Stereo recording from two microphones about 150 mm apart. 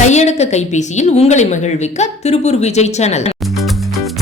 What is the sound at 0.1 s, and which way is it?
A woman's voice, 50° left (ahead or behind).